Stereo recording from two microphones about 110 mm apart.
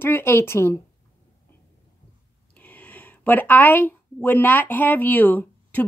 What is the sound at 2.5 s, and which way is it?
A woman's voice, 15° left (ahead or behind).